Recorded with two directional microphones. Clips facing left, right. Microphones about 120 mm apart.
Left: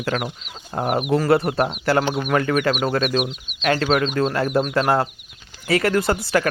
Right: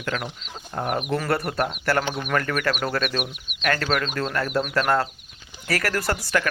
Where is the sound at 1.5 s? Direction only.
25° left (ahead or behind).